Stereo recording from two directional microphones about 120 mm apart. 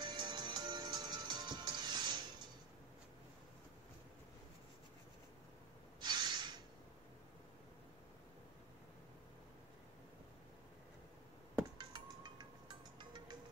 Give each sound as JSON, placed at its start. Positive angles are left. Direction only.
{"t": 0.0, "sound": "music", "side_deg": -35}
{"t": 5.9, "sound": "a sound", "side_deg": -35}
{"t": 11.8, "sound": "music", "side_deg": -40}